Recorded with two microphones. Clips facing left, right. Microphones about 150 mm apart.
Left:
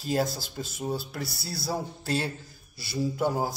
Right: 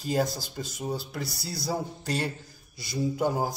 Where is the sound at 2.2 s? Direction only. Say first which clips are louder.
Right 1 dB; 15° right (ahead or behind).